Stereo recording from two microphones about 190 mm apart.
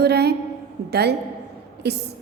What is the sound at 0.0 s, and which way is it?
A woman's voice, 60° right (ahead or behind).